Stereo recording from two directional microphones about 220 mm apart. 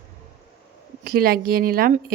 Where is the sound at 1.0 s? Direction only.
45° right (ahead or behind).